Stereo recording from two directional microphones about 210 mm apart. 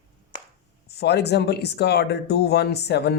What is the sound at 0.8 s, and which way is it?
Speech, 50° left (ahead or behind).